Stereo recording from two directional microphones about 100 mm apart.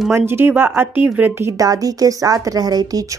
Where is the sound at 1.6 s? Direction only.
35° right (ahead or behind).